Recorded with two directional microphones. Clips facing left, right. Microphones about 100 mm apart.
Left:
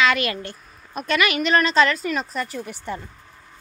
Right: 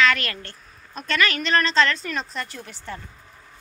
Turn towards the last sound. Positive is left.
turn(degrees=15)  # may be behind; listen again after turning